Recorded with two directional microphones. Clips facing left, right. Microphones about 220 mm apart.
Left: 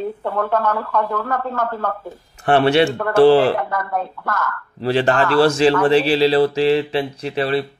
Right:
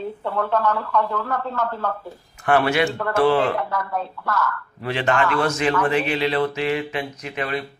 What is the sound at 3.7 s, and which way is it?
Speech, 50° left (ahead or behind).